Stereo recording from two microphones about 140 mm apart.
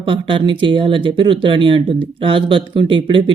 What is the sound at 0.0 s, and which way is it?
Speech, 35° right (ahead or behind).